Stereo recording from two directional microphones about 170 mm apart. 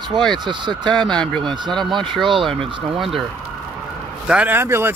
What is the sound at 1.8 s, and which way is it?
Speech, 30° right (ahead or behind).